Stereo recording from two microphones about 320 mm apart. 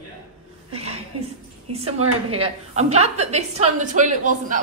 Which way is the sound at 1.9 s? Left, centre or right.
Centre.